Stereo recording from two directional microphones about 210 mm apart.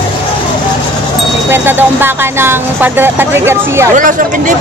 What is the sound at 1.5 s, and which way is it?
Speech, 10° right (ahead or behind).